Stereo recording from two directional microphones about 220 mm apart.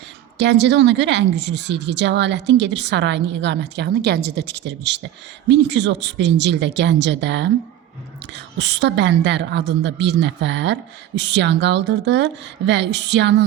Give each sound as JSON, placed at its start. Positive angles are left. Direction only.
{"t": 0.3, "sound": "a woman's voice", "side_deg": -50}